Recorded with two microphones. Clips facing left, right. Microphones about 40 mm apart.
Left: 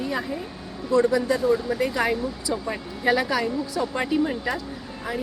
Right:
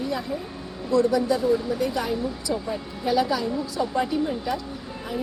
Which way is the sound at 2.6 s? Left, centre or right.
Left.